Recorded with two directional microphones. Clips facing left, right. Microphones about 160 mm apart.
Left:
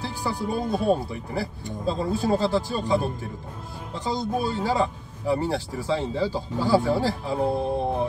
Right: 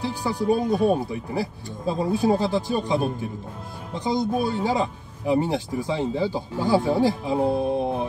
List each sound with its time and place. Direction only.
0.0 s speech: 15° right (ahead or behind)